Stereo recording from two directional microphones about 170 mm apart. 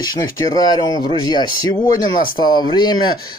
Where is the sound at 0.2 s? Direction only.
25° left (ahead or behind).